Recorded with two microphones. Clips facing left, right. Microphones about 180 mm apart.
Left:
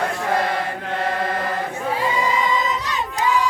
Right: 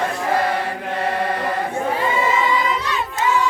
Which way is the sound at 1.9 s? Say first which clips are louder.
Even; 10° left (ahead or behind).